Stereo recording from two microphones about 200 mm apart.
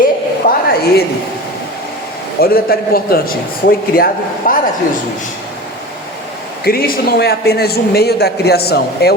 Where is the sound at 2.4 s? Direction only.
50° left (ahead or behind).